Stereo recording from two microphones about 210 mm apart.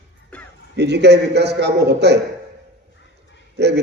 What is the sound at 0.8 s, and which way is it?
A man's voice, 55° right (ahead or behind).